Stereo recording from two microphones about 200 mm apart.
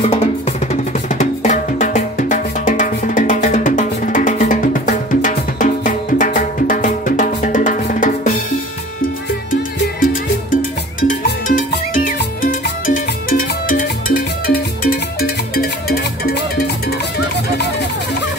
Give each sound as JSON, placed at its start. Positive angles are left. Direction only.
{"t": 0.0, "sound": "drum", "side_deg": 30}
{"t": 10.5, "sound": "music", "side_deg": 40}